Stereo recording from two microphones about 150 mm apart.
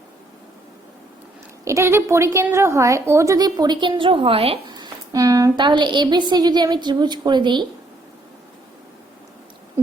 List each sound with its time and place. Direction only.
1.6 s a woman's voice: 20° right (ahead or behind); by 4.6 s 40° right (ahead or behind)
4.7 s a woman's voice: 25° right (ahead or behind)